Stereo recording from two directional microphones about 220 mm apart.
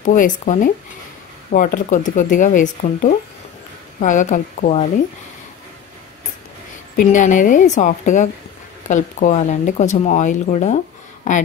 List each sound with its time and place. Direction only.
0.0 s speech: 35° left (ahead or behind)
7.0 s speech: 35° left (ahead or behind)